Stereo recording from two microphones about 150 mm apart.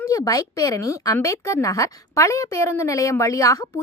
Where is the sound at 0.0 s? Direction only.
25° left (ahead or behind).